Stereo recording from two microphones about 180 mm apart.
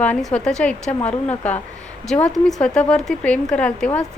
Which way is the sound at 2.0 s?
5° left (ahead or behind).